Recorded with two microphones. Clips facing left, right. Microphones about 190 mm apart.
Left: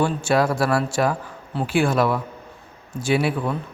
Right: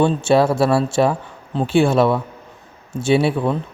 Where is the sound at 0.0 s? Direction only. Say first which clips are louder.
Right 5 dB; 25° right (ahead or behind).